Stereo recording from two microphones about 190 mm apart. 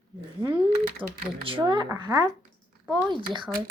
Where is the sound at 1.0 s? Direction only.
25° right (ahead or behind).